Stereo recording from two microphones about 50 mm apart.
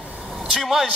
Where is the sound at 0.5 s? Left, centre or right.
Centre.